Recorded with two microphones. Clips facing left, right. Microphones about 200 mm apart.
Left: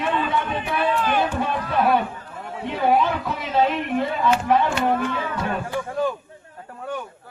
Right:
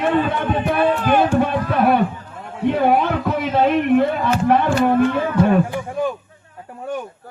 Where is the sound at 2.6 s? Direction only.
55° right (ahead or behind).